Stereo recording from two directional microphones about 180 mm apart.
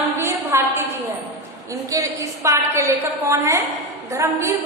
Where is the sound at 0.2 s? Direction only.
15° right (ahead or behind).